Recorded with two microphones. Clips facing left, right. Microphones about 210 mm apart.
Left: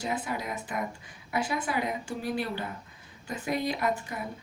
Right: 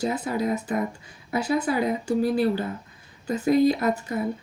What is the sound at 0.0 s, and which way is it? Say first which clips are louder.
Speech: right 7 dB; 40° right (ahead or behind).